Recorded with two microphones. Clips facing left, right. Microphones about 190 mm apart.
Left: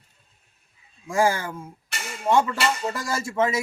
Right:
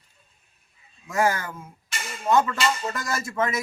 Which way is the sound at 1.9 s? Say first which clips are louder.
Right 1 dB; 65° left (ahead or behind).